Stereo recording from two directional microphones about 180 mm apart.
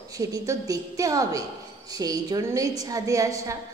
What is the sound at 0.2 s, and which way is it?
A woman's voice, 20° right (ahead or behind).